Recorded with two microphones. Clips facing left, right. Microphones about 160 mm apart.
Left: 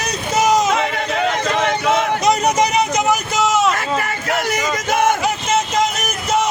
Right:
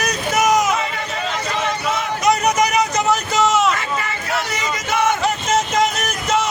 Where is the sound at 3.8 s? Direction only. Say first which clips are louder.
Left 3 dB; 45° left (ahead or behind).